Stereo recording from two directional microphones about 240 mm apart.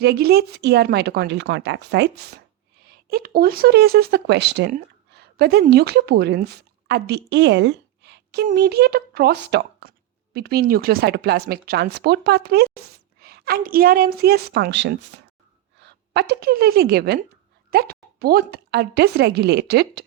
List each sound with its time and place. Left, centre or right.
0.0 s a woman's voice: right